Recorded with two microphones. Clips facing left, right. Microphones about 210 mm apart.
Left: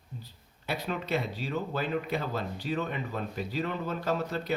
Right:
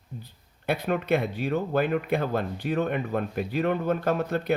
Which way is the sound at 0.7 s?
55° right (ahead or behind).